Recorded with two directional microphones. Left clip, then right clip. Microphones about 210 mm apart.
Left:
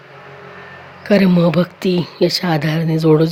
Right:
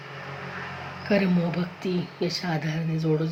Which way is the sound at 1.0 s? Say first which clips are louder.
Left 11 dB; 50° left (ahead or behind).